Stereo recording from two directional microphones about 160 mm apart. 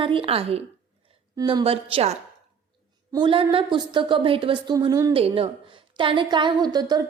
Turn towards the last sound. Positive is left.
turn(degrees=-25)  # may be behind; listen again after turning